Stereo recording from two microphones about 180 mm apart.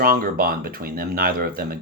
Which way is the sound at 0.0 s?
55° right (ahead or behind).